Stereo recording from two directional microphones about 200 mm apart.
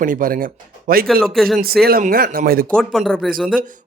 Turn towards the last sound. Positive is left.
turn(degrees=0)  # may be behind; listen again after turning